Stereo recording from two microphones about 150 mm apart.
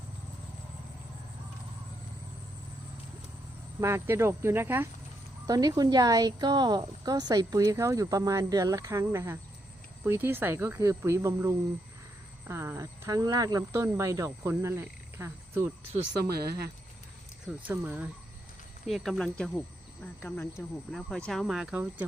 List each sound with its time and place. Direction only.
3.8 s speech: 15° right (ahead or behind)
16.2 s speech: 90° right
17.4 s speech: 10° right (ahead or behind)
18.9 s speech: centre (ahead or behind)
20.2 s speech: 15° left (ahead or behind)
20.9 s speech: 5° left (ahead or behind)